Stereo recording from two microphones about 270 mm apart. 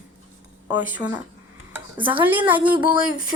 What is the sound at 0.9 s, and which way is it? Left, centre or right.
Speech, centre.